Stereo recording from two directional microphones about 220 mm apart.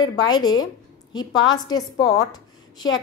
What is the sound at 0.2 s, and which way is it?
A woman's voice, 20° left (ahead or behind).